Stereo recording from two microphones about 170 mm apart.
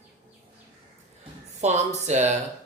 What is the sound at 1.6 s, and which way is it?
Speech, 40° right (ahead or behind).